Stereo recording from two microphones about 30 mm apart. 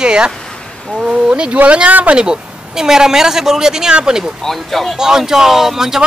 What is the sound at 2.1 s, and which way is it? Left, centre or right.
Speech, right.